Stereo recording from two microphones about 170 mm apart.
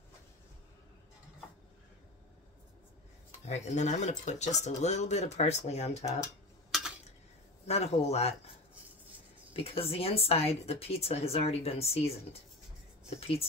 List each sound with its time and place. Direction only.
3.4 s speech: 40° left (ahead or behind)
6.7 s a sound: centre (ahead or behind)
7.6 s speech: 40° left (ahead or behind)
9.5 s speech: 35° left (ahead or behind)